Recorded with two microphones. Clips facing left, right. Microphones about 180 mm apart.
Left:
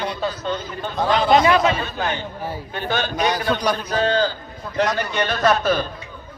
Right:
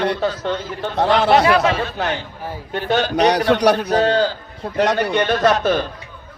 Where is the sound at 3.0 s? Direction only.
70° right (ahead or behind).